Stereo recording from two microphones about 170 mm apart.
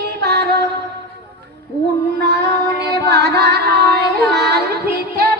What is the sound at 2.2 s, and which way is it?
Female singing, 80° right.